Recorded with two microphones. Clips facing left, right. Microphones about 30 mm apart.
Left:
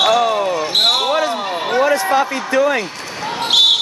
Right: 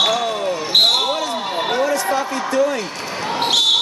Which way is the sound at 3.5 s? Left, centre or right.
Centre.